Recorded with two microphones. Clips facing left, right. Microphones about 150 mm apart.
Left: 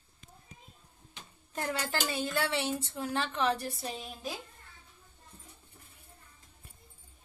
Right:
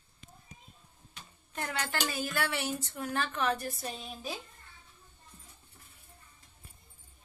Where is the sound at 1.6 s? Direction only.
30° left (ahead or behind).